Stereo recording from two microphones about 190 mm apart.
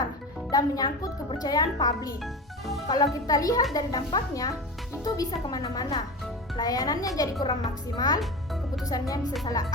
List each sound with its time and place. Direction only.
0.5 s speech: 20° left (ahead or behind)
2.2 s speech: centre (ahead or behind)
2.8 s speech: 20° left (ahead or behind)